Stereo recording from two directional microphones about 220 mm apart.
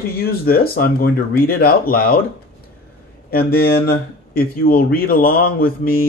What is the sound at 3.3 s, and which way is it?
Speech, 45° left (ahead or behind).